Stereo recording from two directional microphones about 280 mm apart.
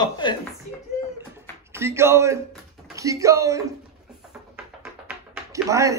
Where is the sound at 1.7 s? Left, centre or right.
Centre.